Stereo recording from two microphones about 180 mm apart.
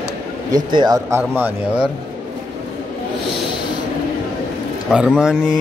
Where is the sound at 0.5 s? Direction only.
25° right (ahead or behind).